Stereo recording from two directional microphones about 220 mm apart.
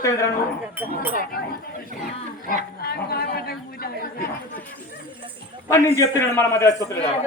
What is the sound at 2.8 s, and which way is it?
Speech, 45° left (ahead or behind).